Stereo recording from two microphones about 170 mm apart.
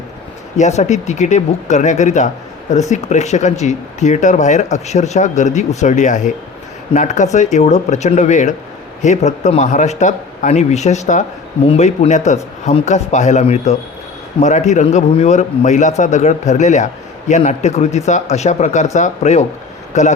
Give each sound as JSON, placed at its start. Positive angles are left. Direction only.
{"t": 0.5, "sound": "a man's voice", "side_deg": 45}